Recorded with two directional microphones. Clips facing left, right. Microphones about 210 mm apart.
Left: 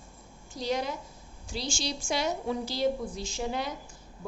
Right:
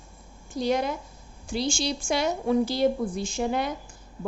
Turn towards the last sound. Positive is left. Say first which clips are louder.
# right 6 dB
turn(degrees=-55)  # may be behind; listen again after turning